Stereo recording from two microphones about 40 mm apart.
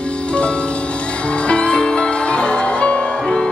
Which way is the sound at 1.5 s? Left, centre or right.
Left.